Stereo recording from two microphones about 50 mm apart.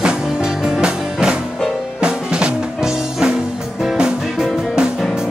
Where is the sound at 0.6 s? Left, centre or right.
Centre.